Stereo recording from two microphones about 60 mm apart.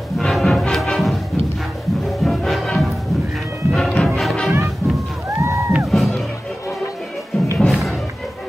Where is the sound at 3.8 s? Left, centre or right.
Centre.